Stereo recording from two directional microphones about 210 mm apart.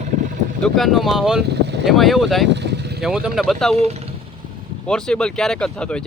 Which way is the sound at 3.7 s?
30° right (ahead or behind).